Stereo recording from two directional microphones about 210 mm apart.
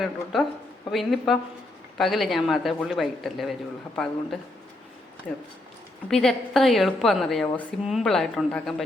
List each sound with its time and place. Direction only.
0.9 s a woman's voice: centre (ahead or behind)